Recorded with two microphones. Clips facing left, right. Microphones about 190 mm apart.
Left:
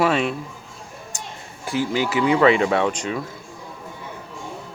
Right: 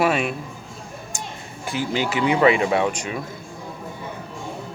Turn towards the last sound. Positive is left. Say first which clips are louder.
# left 1 dB
turn(degrees=-10)  # may be behind; listen again after turning